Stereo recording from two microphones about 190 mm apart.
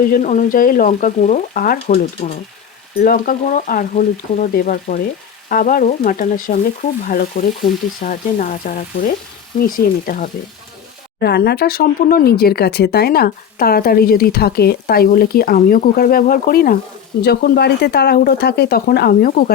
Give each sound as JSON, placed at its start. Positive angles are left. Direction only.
{"t": 0.1, "sound": "speech", "side_deg": 45}
{"t": 11.2, "sound": "speech", "side_deg": 55}